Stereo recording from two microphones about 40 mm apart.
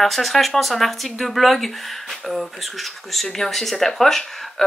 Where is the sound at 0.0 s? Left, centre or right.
Centre.